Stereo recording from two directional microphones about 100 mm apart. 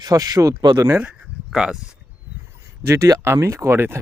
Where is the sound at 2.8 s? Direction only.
30° right (ahead or behind).